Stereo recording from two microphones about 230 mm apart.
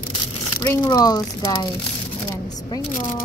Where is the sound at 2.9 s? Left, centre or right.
Left.